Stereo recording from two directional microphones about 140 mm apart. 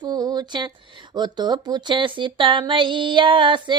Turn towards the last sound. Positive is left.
turn(degrees=-35)  # may be behind; listen again after turning